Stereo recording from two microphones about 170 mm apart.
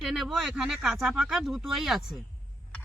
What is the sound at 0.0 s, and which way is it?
Speech, centre (ahead or behind).